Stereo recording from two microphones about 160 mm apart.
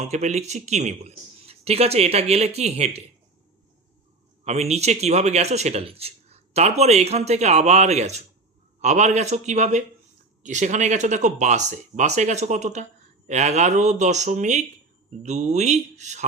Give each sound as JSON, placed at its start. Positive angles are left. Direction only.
{"t": 0.0, "sound": "speech", "side_deg": -45}
{"t": 4.4, "sound": "speech", "side_deg": -40}